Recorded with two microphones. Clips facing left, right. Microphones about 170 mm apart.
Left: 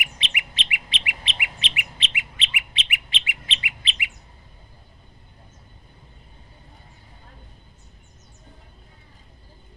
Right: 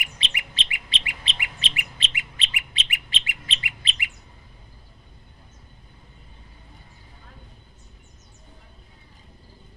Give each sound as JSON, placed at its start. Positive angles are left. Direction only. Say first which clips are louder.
{"t": 0.0, "sound": "bird", "louder": "left 2 dB", "side_deg": -35}